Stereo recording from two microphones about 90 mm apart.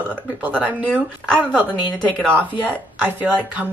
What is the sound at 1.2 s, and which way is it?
Speech, 10° left (ahead or behind).